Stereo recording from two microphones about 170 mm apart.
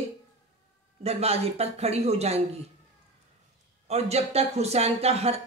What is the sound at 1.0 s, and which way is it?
Speech, 35° right (ahead or behind).